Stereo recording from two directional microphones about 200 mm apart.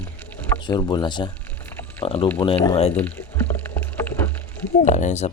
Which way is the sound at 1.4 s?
10° left (ahead or behind).